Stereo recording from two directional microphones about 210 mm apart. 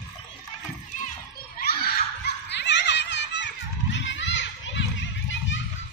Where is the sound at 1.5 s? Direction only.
45° left (ahead or behind); by 5.5 s 60° left (ahead or behind).